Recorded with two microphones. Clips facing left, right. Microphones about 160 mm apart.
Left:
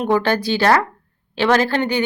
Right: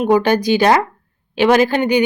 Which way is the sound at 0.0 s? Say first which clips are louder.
Right 4 dB; 15° right (ahead or behind).